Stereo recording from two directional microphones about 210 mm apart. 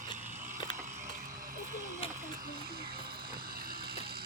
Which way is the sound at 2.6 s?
45° right (ahead or behind).